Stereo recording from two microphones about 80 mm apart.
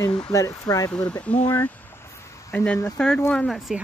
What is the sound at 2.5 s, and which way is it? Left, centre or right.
Speech, centre.